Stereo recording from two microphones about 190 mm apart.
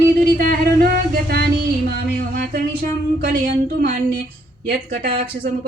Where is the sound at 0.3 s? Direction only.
50° right (ahead or behind).